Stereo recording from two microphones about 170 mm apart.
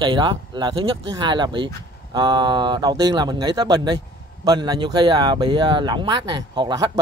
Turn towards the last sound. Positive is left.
turn(degrees=-25)  # may be behind; listen again after turning